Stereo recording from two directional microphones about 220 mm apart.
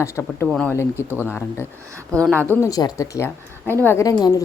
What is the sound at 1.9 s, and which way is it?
Speech, 15° right (ahead or behind).